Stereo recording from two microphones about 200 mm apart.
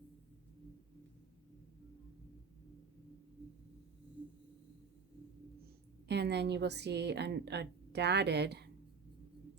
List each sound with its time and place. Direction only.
6.1 s a woman's voice: 55° right (ahead or behind)